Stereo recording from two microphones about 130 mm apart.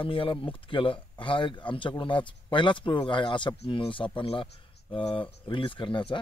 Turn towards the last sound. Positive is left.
turn(degrees=40)  # may be behind; listen again after turning